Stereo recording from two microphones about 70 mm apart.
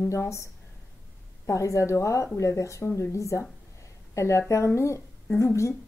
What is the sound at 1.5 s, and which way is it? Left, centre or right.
A woman's voice, left.